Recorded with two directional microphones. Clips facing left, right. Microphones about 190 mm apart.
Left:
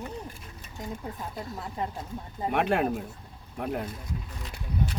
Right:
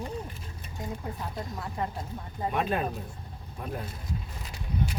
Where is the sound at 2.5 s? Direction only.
70° left (ahead or behind).